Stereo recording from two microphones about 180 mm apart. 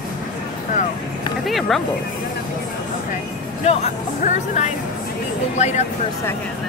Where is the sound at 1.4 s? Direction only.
Centre (ahead or behind).